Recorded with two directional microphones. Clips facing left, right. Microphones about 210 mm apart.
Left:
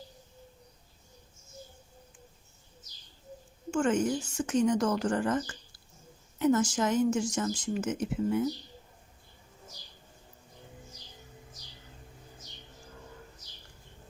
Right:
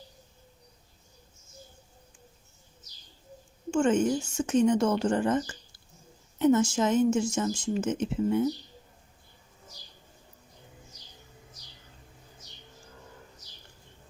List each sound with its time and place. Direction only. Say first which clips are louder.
3.7 s speech: right 3 dB; 25° right (ahead or behind)